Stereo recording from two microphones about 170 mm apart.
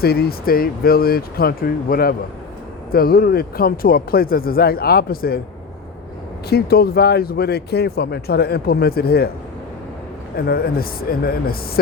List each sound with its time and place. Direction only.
0.0 s speech: 65° left (ahead or behind)
6.5 s speech: 65° left (ahead or behind)
10.3 s speech: 65° left (ahead or behind)